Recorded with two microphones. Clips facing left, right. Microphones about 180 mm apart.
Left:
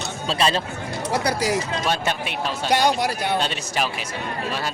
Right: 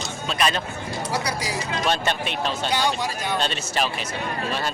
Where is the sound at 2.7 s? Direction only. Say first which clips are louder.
Left 8 dB; 70° left (ahead or behind).